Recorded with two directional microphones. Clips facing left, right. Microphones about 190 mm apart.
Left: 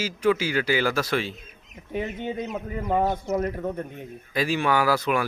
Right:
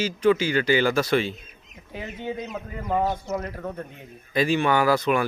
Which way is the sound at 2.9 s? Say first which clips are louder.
Left 1 dB; 15° left (ahead or behind).